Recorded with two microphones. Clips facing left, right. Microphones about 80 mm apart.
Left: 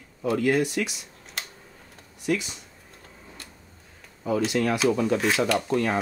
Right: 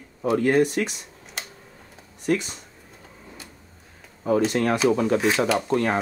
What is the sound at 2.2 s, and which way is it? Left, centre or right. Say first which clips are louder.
Speech: right 3 dB; right.